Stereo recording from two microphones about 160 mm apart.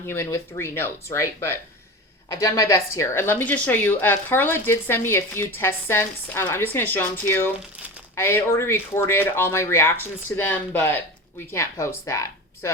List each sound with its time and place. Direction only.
0.0 s a woman's voice: 15° left (ahead or behind)